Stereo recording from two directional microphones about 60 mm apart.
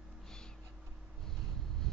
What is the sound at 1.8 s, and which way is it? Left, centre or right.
Vehicle, centre.